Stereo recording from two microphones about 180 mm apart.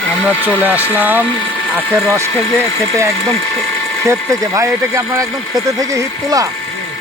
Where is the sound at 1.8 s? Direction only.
10° left (ahead or behind).